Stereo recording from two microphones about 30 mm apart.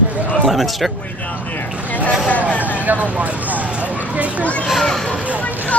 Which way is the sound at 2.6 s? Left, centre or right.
Right.